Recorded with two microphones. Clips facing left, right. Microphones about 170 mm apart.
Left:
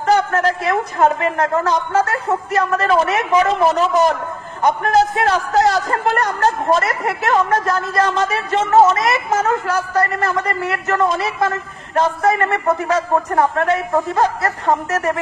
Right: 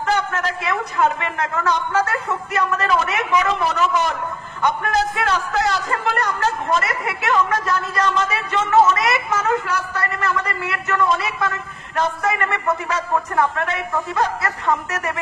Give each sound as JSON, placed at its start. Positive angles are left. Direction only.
{"t": 0.0, "sound": "a woman's voice", "side_deg": 40}